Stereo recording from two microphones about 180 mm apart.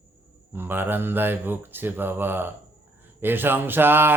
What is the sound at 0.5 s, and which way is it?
Mantra, 10° right (ahead or behind).